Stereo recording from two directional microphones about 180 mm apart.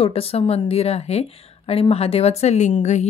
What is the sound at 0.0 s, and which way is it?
A woman's voice, 35° left (ahead or behind).